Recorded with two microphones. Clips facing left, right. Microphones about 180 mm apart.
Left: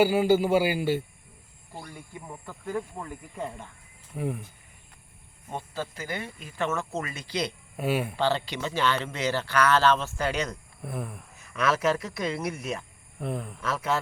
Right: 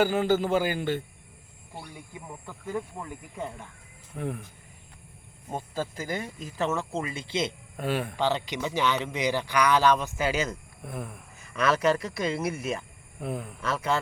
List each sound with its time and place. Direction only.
0.0 s a man's voice: 10° left (ahead or behind)
2.5 s speech: centre (ahead or behind)
6.1 s speech: 40° right (ahead or behind); by 7.5 s 25° right (ahead or behind)
7.8 s a man's voice: 10° left (ahead or behind)
8.1 s a man's voice: 15° right (ahead or behind); by 14.0 s centre (ahead or behind)